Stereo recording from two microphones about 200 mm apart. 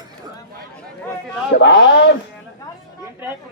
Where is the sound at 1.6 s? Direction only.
60° left (ahead or behind).